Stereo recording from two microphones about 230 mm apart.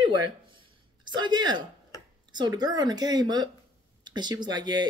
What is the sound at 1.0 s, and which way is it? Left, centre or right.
A woman's voice, centre.